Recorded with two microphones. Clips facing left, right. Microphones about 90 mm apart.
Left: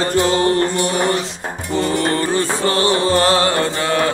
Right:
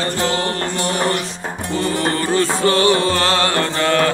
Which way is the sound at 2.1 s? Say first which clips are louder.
Even; 30° left (ahead or behind).